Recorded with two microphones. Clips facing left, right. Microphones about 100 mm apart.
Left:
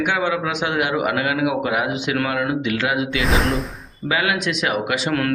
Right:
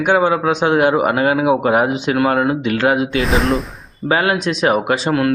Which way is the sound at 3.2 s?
Centre (ahead or behind).